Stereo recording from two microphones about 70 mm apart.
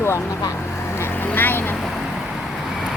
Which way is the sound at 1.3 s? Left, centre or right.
Left.